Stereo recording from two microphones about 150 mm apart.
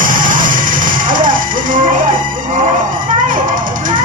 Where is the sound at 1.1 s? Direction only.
65° right (ahead or behind).